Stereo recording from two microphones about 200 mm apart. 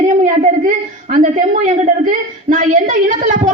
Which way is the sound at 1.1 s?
40° right (ahead or behind).